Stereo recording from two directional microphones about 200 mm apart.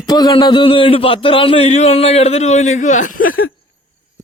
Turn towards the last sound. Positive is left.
turn(degrees=40)  # may be behind; listen again after turning